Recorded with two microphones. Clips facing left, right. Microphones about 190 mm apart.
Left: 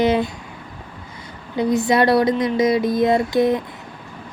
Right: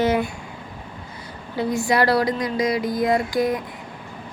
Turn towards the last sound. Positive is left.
turn(degrees=25)  # may be behind; listen again after turning